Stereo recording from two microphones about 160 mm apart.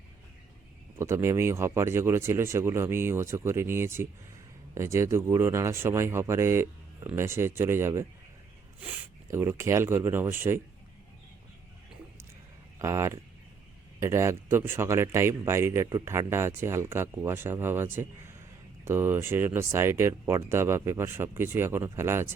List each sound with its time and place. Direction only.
0.9 s speech: 15° right (ahead or behind)
12.8 s speech: 20° right (ahead or behind)